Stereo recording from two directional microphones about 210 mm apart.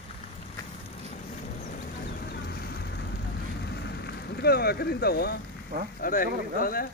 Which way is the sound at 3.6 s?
50° left (ahead or behind).